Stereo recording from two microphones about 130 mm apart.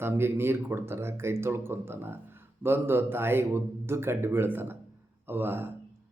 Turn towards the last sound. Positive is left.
turn(degrees=-15)  # may be behind; listen again after turning